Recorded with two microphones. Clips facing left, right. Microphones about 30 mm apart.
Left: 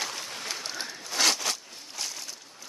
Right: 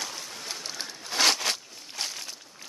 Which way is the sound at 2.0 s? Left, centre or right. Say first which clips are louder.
Right 2 dB; right.